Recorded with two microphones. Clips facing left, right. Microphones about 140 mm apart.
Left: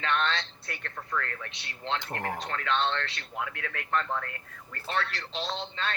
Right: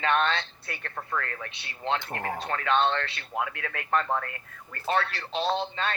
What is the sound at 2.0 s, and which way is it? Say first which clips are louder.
Speech: right 1 dB; 10° right (ahead or behind).